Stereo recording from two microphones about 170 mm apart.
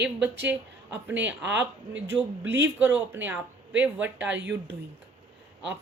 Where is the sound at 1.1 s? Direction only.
90° right.